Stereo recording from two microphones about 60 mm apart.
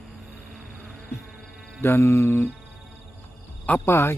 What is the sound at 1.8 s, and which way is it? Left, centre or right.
Speech, left.